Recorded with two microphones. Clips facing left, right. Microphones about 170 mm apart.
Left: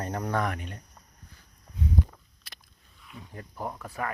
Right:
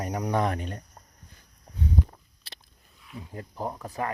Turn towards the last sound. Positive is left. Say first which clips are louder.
# right 2 dB
turn(degrees=-20)  # may be behind; listen again after turning